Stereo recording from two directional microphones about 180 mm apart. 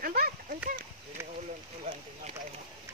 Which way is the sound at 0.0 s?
55° right (ahead or behind).